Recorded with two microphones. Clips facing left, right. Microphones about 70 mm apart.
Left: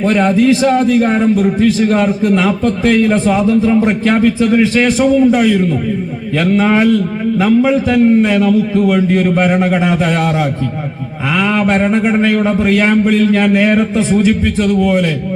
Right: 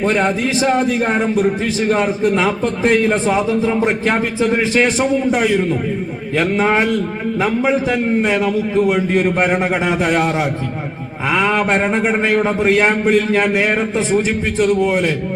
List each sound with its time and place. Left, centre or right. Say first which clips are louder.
0.0 s a man's voice: left 5 dB; centre
11.3 s a man's voice: left 3 dB; right